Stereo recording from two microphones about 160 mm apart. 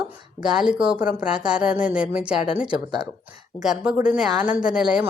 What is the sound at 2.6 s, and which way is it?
Speech, 30° right (ahead or behind).